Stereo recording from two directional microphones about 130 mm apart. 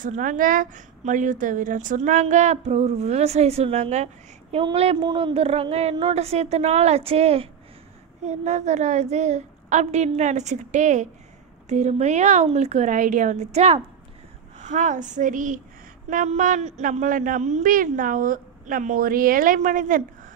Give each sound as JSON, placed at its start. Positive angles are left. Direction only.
{"t": 0.0, "sound": "a woman's voice", "side_deg": -85}
{"t": 5.0, "sound": "a woman's voice", "side_deg": -40}
{"t": 8.3, "sound": "a woman's voice", "side_deg": -60}
{"t": 14.6, "sound": "a woman's voice", "side_deg": -70}